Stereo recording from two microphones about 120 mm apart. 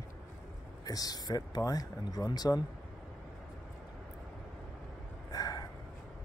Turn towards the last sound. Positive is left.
turn(degrees=30)  # may be behind; listen again after turning